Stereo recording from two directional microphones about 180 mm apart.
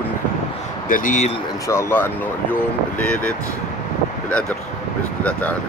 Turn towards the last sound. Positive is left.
turn(degrees=10)  # may be behind; listen again after turning